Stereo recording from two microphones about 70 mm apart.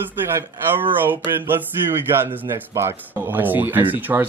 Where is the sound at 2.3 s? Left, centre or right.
Right.